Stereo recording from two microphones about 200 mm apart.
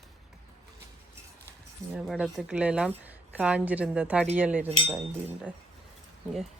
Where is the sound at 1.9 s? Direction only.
5° right (ahead or behind).